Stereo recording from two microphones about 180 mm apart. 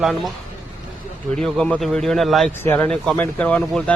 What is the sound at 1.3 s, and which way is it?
A man's voice, 5° left (ahead or behind).